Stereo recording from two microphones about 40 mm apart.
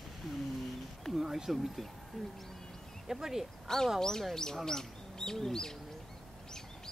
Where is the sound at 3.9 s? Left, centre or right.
Centre.